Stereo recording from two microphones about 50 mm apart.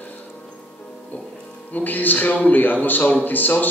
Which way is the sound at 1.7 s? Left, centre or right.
Left.